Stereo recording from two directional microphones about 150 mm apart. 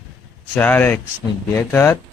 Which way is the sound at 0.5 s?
10° left (ahead or behind).